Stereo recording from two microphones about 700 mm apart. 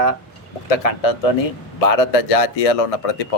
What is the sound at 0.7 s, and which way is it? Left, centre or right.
A man's voice, left.